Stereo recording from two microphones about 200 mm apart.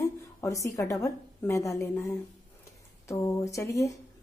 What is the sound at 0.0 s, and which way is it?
A woman's voice, 15° left (ahead or behind).